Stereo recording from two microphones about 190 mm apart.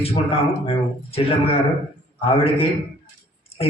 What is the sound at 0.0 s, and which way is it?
A man's voice, 30° left (ahead or behind).